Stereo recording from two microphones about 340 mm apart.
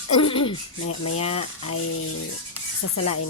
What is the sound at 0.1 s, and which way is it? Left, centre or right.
Speech, centre.